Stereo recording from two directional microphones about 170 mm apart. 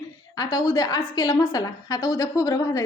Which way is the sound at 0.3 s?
25° left (ahead or behind).